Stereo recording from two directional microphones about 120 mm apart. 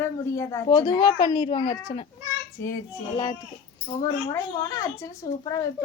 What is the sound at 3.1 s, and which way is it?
A child's voice, 35° left (ahead or behind).